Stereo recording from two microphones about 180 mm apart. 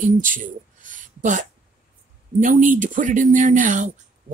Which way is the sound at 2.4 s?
45° right (ahead or behind).